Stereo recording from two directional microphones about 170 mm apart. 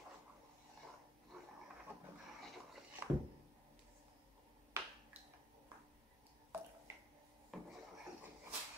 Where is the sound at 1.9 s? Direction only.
15° right (ahead or behind).